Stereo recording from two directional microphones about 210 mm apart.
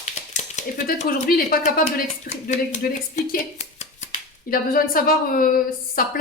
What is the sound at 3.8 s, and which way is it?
Speech, 40° left (ahead or behind).